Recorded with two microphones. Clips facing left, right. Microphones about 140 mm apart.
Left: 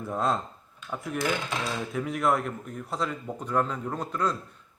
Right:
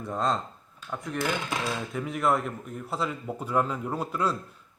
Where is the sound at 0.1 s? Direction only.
5° left (ahead or behind).